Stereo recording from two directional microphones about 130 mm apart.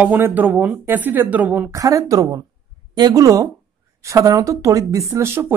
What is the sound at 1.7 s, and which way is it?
Speech, 25° right (ahead or behind).